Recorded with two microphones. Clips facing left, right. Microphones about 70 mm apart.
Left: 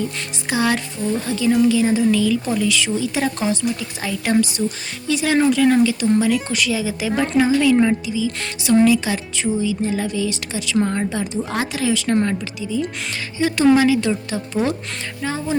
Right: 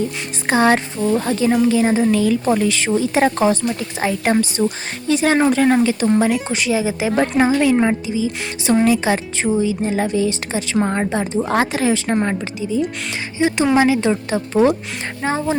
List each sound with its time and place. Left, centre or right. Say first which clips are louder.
0.4 s a woman's voice: right 5 dB; right
6.5 s a woman's voice: right 3 dB; right
13.4 s a woman's voice: even; right